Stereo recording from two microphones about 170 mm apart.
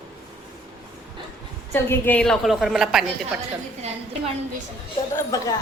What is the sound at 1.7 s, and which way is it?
A woman's voice, 10° left (ahead or behind).